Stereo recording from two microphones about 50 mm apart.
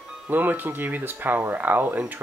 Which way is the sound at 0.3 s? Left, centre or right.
Right.